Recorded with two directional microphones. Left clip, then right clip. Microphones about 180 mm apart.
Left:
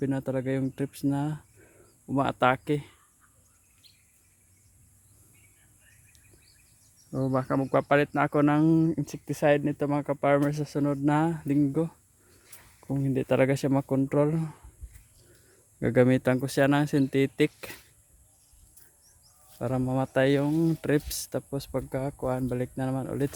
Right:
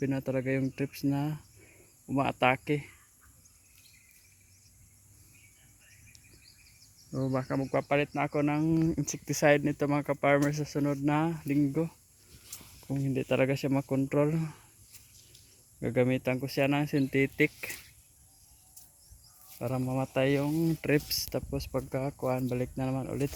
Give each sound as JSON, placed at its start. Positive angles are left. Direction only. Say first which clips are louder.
{"t": 0.0, "sound": "speech", "louder": "left 2 dB", "side_deg": 10}
{"t": 7.3, "sound": "speech", "louder": "left 5 dB", "side_deg": 20}
{"t": 8.9, "sound": "speech", "louder": "left 1 dB", "side_deg": 5}
{"t": 15.8, "sound": "speech", "louder": "left 6 dB", "side_deg": 35}
{"t": 19.5, "sound": "speech", "louder": "left 4 dB", "side_deg": 20}